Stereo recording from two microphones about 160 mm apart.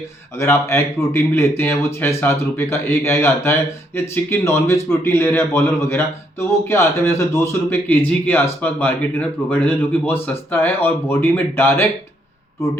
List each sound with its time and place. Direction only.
0.3 s speech: 15° left (ahead or behind)